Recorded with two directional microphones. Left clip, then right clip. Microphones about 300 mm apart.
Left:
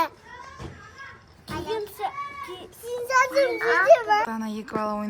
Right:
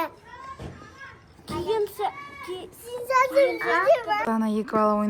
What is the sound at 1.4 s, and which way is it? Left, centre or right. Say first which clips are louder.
A child's voice: right 4 dB; centre.